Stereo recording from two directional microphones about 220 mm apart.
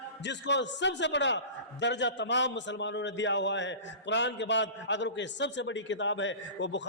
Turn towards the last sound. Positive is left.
turn(degrees=55)  # may be behind; listen again after turning